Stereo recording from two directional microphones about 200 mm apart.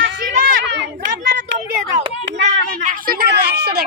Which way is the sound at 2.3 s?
60° right (ahead or behind).